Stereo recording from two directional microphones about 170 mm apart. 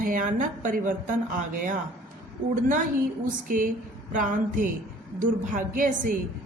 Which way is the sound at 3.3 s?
50° right (ahead or behind).